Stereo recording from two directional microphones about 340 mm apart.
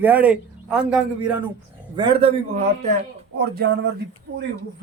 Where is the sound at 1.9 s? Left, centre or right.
Centre.